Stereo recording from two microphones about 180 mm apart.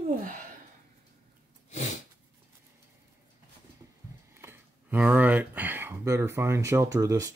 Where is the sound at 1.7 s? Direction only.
40° left (ahead or behind).